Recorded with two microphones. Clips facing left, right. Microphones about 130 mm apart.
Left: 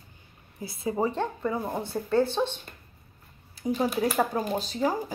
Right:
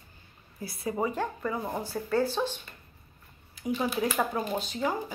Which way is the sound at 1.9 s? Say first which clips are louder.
Left 3 dB; 25° left (ahead or behind).